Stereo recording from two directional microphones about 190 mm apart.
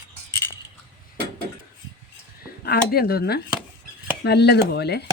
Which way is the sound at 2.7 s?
55° left (ahead or behind).